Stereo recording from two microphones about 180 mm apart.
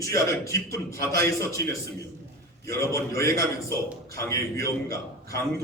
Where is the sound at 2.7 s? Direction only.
15° left (ahead or behind).